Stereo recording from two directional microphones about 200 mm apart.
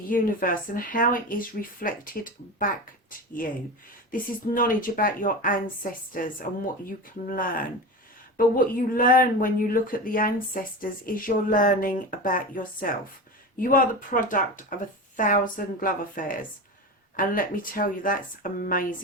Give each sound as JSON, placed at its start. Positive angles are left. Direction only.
{"t": 0.1, "sound": "a woman's voice", "side_deg": 45}